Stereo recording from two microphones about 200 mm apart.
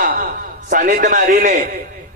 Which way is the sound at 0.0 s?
45° right (ahead or behind).